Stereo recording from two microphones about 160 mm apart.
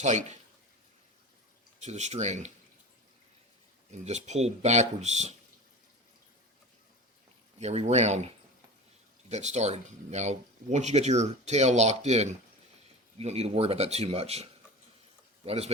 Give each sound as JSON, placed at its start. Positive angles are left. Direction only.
{"t": 0.0, "sound": "speech", "side_deg": -45}
{"t": 1.8, "sound": "speech", "side_deg": -45}
{"t": 4.0, "sound": "speech", "side_deg": -45}
{"t": 7.6, "sound": "speech", "side_deg": -40}
{"t": 9.3, "sound": "speech", "side_deg": -45}
{"t": 15.4, "sound": "speech", "side_deg": -40}